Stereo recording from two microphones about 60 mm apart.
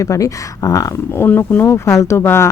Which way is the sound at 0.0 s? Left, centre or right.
Left.